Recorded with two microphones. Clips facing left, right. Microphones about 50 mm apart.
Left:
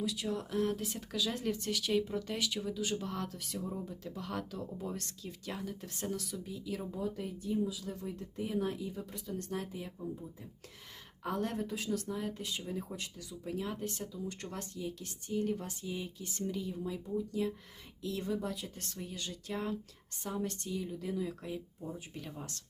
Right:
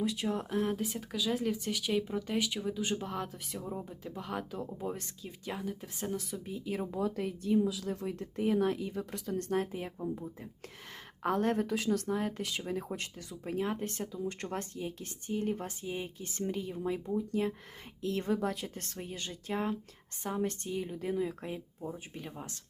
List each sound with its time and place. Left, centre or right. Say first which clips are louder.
0.0 s speech: right 3 dB; right
2.8 s speech: right 2 dB; right
3.1 s speech: right 1 dB; centre
6.3 s speech: right 3 dB; right
6.9 s speech: right 4 dB; right
9.4 s speech: right 8 dB; right
21.9 s speech: right 1 dB; right